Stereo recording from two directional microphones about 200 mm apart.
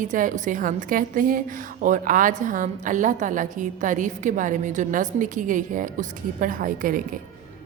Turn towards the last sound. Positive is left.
turn(degrees=-45)  # may be behind; listen again after turning